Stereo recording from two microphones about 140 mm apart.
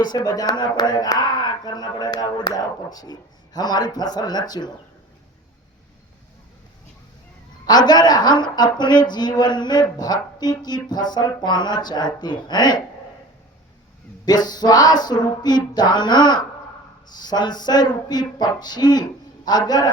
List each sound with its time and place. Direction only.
0.0 s speech: 30° left (ahead or behind)
7.7 s a woman's voice: 30° left (ahead or behind)
14.3 s speech: 30° left (ahead or behind)